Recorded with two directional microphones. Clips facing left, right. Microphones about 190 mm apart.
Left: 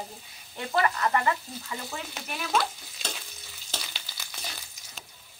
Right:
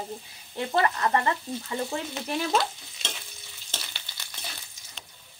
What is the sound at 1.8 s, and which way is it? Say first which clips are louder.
Speech: right 6 dB; 30° right (ahead or behind).